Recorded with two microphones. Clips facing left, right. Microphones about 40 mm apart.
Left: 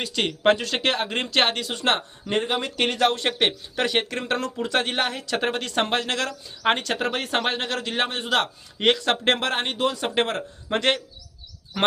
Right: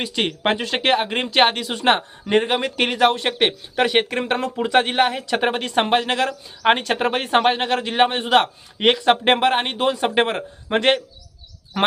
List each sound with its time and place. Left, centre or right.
0.0 s speech: centre
2.3 s speech: right
2.7 s speech: centre